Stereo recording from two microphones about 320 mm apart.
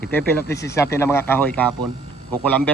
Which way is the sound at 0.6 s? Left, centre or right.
Centre.